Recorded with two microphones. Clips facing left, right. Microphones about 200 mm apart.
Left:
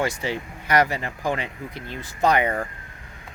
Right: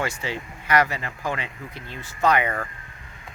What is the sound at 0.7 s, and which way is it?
Speech, 35° left (ahead or behind).